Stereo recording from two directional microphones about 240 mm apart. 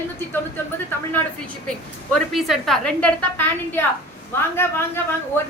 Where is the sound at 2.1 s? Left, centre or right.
Centre.